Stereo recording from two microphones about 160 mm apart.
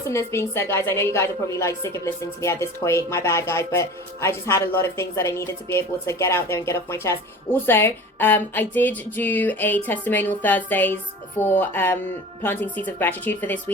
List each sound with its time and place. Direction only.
0.1 s a woman's voice: 15° left (ahead or behind)